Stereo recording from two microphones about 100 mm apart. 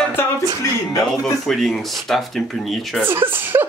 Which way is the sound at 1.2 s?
5° left (ahead or behind).